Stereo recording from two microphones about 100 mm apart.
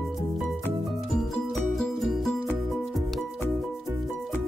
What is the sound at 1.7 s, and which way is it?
Music, centre (ahead or behind).